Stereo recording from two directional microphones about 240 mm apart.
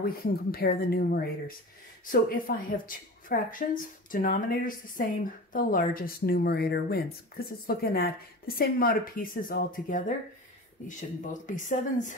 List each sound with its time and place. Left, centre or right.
0.0 s a woman's voice: left